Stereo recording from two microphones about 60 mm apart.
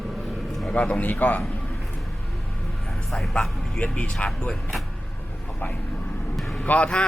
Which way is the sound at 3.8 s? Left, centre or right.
Left.